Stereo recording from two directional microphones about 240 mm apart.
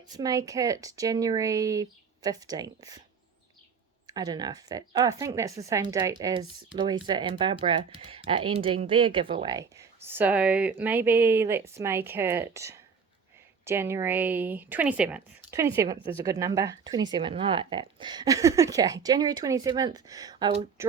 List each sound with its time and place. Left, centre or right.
0.1 s speech: centre
4.0 s speech: centre